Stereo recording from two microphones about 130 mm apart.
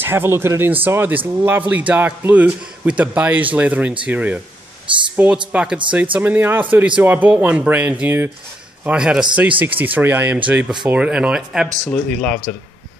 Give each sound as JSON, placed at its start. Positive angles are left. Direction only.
{"t": 0.0, "sound": "speech", "side_deg": -15}
{"t": 11.9, "sound": "speech", "side_deg": 10}